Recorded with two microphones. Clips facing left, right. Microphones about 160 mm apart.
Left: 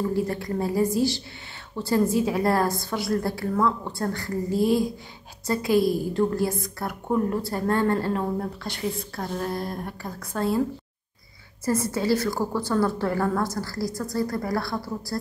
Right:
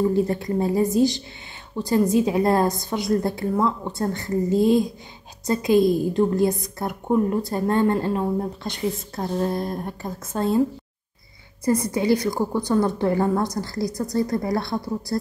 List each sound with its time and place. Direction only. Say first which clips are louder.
0.1 s a woman's voice: right 4 dB; 20° right (ahead or behind)
11.6 s a woman's voice: right 3 dB; 15° right (ahead or behind)